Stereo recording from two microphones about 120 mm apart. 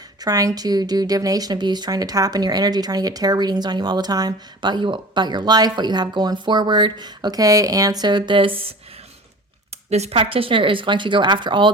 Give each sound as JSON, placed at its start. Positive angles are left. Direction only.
{"t": 0.2, "sound": "a woman's voice", "side_deg": -30}
{"t": 9.9, "sound": "speech", "side_deg": -65}
{"t": 10.2, "sound": "speech", "side_deg": -50}